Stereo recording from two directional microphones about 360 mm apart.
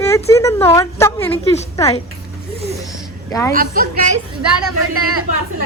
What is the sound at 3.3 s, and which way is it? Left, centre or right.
Speech, centre.